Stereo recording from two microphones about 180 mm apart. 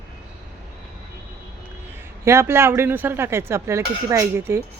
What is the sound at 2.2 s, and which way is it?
Speech, 15° right (ahead or behind).